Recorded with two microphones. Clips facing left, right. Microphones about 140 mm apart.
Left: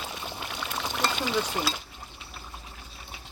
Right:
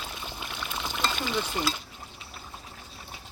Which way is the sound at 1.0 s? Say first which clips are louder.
Left 2 dB; 20° left (ahead or behind).